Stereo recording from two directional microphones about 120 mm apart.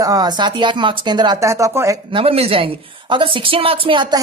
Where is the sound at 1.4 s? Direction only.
25° right (ahead or behind).